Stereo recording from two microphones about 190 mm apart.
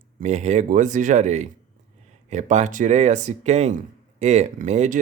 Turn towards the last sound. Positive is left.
turn(degrees=-40)  # may be behind; listen again after turning